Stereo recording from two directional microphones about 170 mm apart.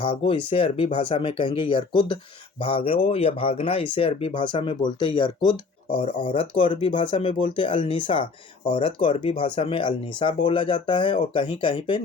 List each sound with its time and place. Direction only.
0.0 s speech: 30° left (ahead or behind)